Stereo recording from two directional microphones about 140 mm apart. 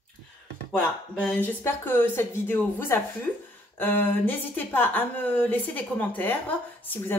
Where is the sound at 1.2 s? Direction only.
15° left (ahead or behind).